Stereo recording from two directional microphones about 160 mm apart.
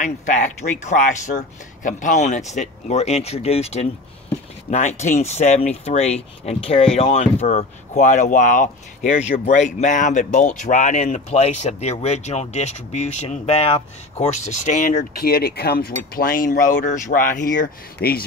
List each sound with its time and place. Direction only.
0.0 s speech: 50° left (ahead or behind); by 18.2 s 75° left (ahead or behind)